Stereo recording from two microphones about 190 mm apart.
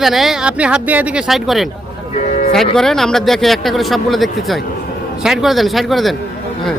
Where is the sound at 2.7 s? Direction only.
Centre (ahead or behind).